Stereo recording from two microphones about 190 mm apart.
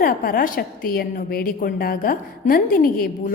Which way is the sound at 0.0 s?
50° left (ahead or behind).